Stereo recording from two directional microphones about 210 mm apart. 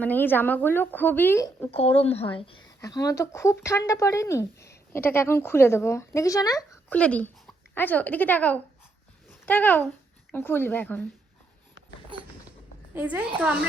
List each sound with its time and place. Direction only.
0.0 s speech: 10° left (ahead or behind)
1.7 s speech: 30° left (ahead or behind)
2.6 s speech: 15° left (ahead or behind)
12.9 s a child's voice: 10° right (ahead or behind)